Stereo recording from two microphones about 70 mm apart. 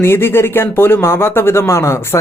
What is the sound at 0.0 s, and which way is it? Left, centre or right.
Speech, left.